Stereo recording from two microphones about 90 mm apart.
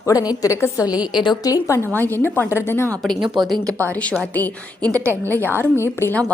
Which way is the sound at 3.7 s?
30° right (ahead or behind).